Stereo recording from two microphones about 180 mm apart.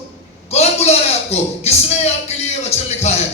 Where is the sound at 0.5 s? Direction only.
35° left (ahead or behind).